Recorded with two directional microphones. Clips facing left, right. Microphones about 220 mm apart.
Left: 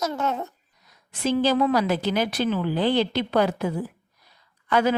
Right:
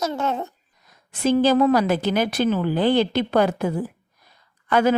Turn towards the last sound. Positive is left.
turn(degrees=-50)  # may be behind; listen again after turning